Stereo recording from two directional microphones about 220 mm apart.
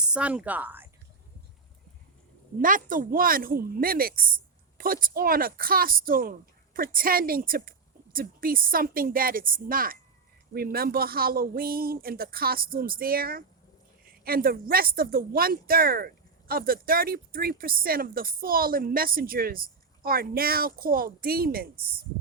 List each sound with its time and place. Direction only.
0.0 s speech: 5° right (ahead or behind)
2.6 s speech: 40° right (ahead or behind)